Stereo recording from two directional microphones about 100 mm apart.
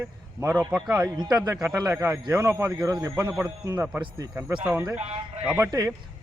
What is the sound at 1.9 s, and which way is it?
Speech, 25° right (ahead or behind).